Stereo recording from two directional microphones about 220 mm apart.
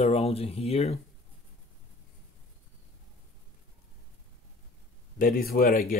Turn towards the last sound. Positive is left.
turn(degrees=40)  # may be behind; listen again after turning